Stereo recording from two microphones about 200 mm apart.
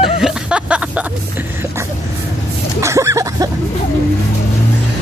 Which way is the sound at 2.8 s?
15° right (ahead or behind).